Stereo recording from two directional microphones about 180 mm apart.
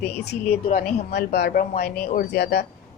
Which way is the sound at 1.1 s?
65° left (ahead or behind).